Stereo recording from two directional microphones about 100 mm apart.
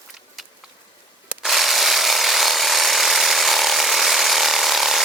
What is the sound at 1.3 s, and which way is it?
Sawing, centre (ahead or behind).